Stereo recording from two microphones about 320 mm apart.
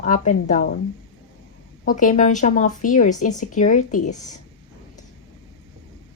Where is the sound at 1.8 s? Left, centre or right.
Left.